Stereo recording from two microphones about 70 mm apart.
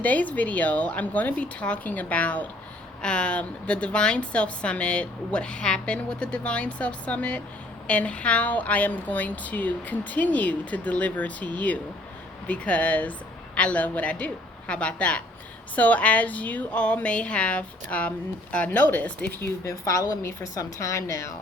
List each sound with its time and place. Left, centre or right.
0.0 s a woman's voice: left
19.6 s a woman's voice: left